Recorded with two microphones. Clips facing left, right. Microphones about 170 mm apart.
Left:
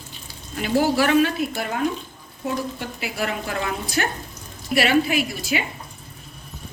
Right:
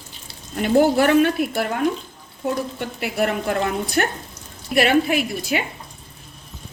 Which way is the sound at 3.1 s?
55° right (ahead or behind).